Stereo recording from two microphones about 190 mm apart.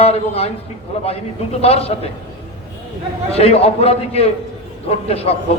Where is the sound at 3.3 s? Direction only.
30° left (ahead or behind).